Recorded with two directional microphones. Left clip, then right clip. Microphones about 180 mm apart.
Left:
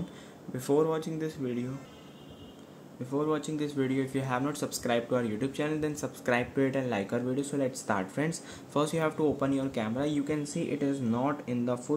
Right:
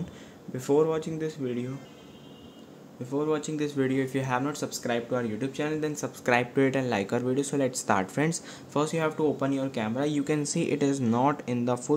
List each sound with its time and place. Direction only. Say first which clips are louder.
0.5 s speech: right 3 dB; 5° right (ahead or behind)
3.1 s speech: right 2 dB; 5° right (ahead or behind); by 8.4 s 20° right (ahead or behind)
8.7 s speech: right 2 dB; 5° right (ahead or behind)